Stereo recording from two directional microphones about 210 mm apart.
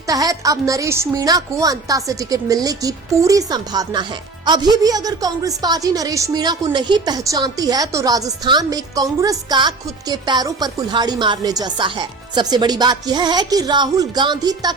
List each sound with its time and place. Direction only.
0.1 s a woman's voice: 15° right (ahead or behind)